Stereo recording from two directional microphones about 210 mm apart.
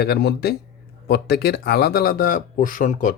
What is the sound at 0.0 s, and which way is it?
Speech, 50° left (ahead or behind).